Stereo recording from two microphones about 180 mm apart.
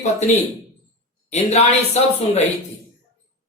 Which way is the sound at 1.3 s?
35° left (ahead or behind).